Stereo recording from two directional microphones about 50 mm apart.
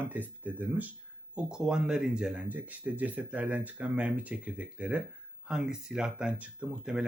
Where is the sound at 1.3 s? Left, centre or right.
Centre.